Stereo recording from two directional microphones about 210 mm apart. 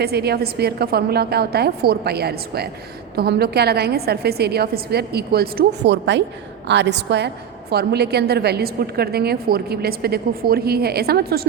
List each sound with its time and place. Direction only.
0.0 s a woman's voice: 50° right (ahead or behind)